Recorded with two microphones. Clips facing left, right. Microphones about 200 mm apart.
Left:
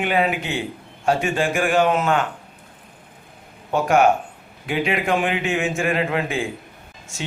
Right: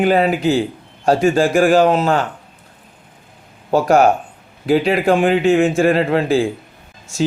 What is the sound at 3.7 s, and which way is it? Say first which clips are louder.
Speech: right 4 dB; 35° right (ahead or behind).